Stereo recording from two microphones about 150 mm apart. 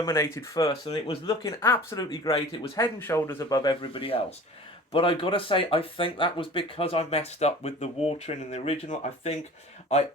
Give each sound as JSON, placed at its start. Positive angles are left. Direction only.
{"t": 0.0, "sound": "speech", "side_deg": 20}
{"t": 0.7, "sound": "speech", "side_deg": 35}
{"t": 1.6, "sound": "speech", "side_deg": 15}
{"t": 2.7, "sound": "speech", "side_deg": 15}
{"t": 3.6, "sound": "speech", "side_deg": 35}